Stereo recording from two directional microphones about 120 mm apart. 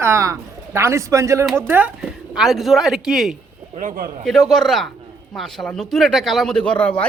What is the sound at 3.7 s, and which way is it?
Speech, 90° right.